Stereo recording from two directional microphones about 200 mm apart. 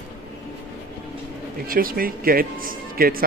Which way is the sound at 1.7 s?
45° right (ahead or behind).